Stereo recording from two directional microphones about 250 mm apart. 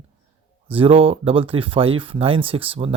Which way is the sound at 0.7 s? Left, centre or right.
Right.